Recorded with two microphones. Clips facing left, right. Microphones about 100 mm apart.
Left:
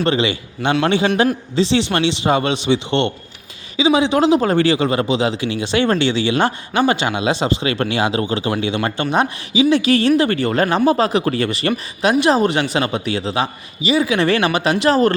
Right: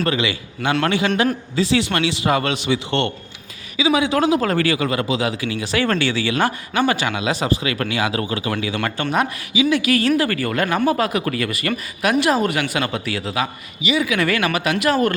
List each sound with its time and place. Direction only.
0.0 s speech: 30° left (ahead or behind)